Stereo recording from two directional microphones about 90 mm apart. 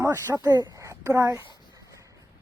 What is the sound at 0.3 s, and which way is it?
Speech, 45° right (ahead or behind).